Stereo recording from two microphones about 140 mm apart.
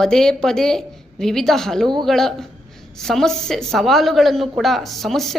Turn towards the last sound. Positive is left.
turn(degrees=0)  # may be behind; listen again after turning